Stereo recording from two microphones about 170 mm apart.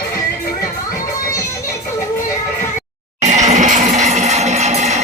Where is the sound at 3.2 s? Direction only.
40° right (ahead or behind).